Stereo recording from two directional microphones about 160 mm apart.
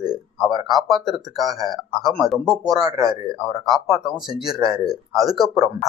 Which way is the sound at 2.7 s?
25° right (ahead or behind).